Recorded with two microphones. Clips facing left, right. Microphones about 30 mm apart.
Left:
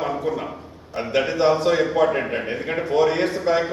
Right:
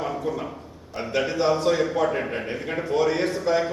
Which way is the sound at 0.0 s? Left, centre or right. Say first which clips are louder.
Left 3 dB; left.